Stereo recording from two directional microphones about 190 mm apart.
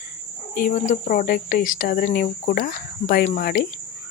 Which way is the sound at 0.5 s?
45° left (ahead or behind).